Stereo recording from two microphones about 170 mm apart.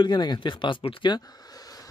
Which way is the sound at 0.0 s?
25° left (ahead or behind).